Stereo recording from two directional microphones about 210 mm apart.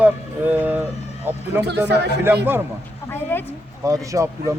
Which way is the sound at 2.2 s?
10° right (ahead or behind).